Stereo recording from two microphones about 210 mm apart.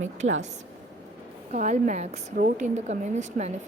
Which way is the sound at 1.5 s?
35° right (ahead or behind).